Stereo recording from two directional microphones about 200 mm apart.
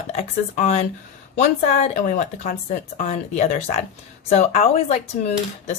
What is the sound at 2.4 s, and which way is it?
Speech, 40° left (ahead or behind).